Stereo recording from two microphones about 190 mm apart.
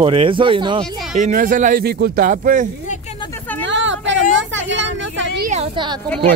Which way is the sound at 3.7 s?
75° right (ahead or behind).